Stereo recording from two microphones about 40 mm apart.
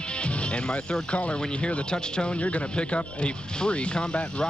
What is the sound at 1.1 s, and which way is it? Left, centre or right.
Speech, left.